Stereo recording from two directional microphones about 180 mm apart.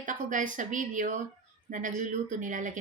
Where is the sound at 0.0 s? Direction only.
45° right (ahead or behind).